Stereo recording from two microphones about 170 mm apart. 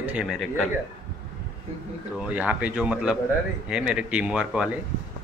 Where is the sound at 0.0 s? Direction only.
5° right (ahead or behind).